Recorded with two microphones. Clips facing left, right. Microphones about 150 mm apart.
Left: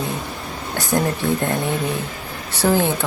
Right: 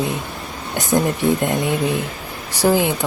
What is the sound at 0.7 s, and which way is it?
A woman's voice, 20° right (ahead or behind).